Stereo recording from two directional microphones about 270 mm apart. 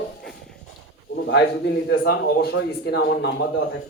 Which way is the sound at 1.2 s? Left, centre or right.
Left.